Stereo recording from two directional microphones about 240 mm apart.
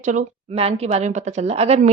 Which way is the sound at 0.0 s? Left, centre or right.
Right.